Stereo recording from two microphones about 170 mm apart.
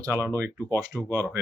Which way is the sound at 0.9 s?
15° left (ahead or behind).